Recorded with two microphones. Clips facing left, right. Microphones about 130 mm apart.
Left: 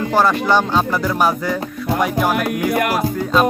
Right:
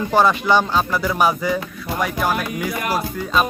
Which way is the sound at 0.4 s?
15° right (ahead or behind).